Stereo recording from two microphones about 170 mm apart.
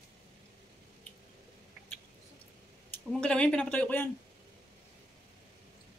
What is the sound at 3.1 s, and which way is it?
Speech, 5° left (ahead or behind).